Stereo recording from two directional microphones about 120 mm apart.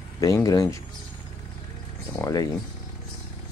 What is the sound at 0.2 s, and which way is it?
Speech, 30° left (ahead or behind).